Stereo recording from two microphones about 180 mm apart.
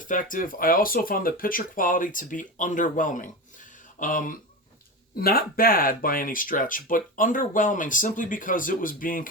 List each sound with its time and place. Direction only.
0.0 s speech: 45° left (ahead or behind)